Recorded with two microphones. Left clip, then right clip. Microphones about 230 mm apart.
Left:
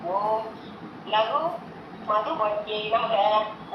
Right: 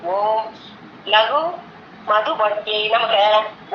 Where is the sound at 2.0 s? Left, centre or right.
Right.